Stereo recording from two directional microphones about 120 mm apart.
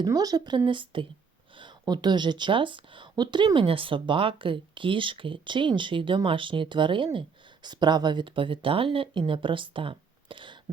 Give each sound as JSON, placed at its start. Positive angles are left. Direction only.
{"t": 0.0, "sound": "a woman's voice", "side_deg": -30}